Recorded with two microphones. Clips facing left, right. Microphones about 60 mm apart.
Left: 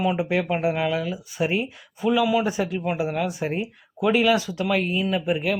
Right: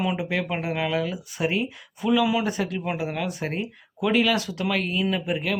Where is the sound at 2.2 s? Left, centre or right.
Centre.